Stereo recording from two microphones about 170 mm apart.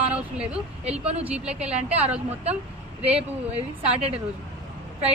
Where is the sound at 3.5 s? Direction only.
35° right (ahead or behind).